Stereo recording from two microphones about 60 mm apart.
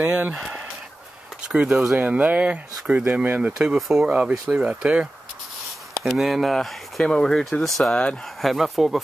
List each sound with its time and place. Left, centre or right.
0.0 s speech: right
1.5 s speech: centre
3.5 s speech: centre
4.0 s speech: centre
6.0 s speech: centre